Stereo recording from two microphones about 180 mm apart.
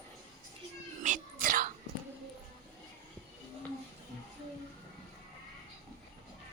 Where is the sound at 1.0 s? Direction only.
50° right (ahead or behind).